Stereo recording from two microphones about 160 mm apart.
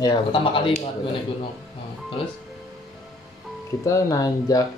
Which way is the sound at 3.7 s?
20° left (ahead or behind).